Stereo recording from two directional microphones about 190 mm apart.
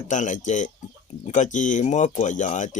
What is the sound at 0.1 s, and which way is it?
Speech, 40° left (ahead or behind).